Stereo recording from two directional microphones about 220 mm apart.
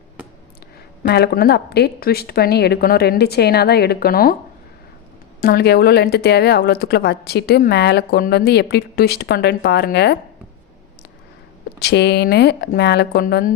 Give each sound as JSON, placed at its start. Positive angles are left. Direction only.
{"t": 1.0, "sound": "a woman's voice", "side_deg": 45}
{"t": 5.4, "sound": "a woman's voice", "side_deg": 45}
{"t": 11.8, "sound": "a woman's voice", "side_deg": 50}